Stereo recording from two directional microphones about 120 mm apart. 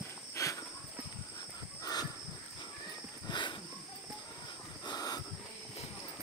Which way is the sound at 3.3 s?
40° left (ahead or behind).